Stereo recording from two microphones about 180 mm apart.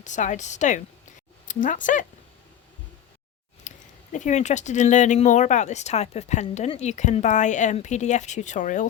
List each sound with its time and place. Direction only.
0.0 s speech: 40° left (ahead or behind)
3.7 s a sound: 45° left (ahead or behind)
4.1 s speech: 40° left (ahead or behind)